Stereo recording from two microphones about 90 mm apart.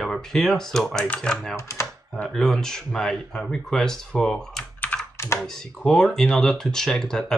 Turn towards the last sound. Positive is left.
turn(degrees=5)  # may be behind; listen again after turning